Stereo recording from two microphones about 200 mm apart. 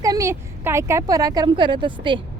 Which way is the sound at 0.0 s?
15° right (ahead or behind).